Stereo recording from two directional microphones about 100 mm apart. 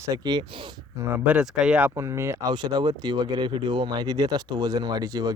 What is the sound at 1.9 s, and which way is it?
Speech, 30° right (ahead or behind).